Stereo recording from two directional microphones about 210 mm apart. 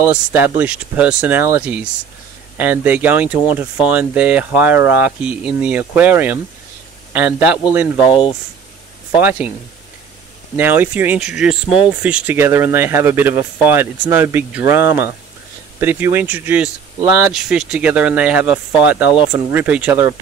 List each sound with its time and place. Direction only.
0.0 s speech: 10° right (ahead or behind)
8.1 s speech: 25° left (ahead or behind)
9.1 s speech: 5° right (ahead or behind)
10.5 s speech: 10° right (ahead or behind)